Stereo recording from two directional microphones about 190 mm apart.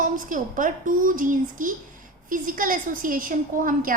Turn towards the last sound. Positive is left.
turn(degrees=-45)  # may be behind; listen again after turning